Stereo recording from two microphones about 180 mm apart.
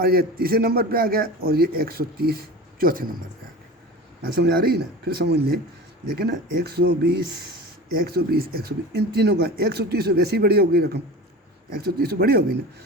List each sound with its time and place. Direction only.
0.0 s a man's voice: 55° right (ahead or behind)
4.4 s a man's voice: 60° right (ahead or behind)
7.9 s a man's voice: 60° right (ahead or behind)